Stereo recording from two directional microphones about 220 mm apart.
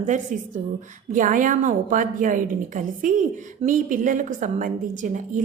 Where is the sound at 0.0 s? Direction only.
35° right (ahead or behind).